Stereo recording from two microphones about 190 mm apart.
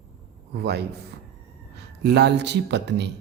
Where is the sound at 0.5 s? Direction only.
60° right (ahead or behind).